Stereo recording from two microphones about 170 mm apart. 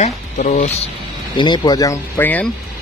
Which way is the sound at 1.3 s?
25° left (ahead or behind).